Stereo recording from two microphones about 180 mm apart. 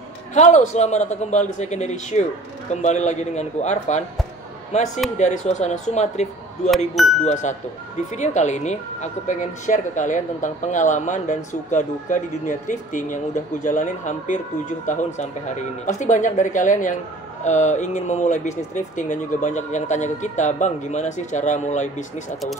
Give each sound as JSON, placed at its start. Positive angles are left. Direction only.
{"t": 0.3, "sound": "speech", "side_deg": 40}
{"t": 7.0, "sound": "speech", "side_deg": 0}
{"t": 8.1, "sound": "speech", "side_deg": 40}